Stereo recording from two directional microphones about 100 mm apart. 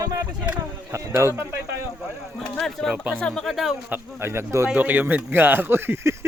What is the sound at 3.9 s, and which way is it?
Speech, 25° right (ahead or behind).